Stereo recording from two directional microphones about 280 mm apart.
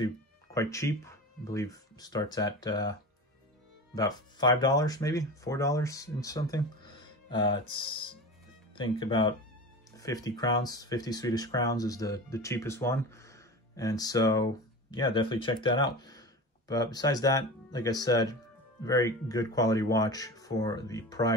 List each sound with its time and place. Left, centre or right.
0.6 s speech: centre